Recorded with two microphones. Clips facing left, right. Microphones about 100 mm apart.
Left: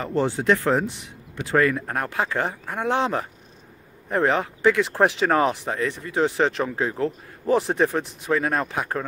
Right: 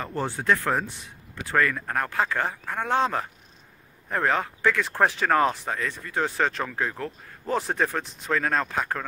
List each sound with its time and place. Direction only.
0.0 s speech: 20° left (ahead or behind)